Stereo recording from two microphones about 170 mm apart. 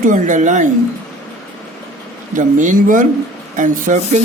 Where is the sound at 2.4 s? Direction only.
50° right (ahead or behind).